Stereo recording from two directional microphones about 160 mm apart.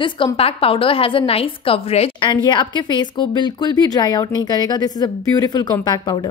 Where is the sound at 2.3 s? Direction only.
30° left (ahead or behind).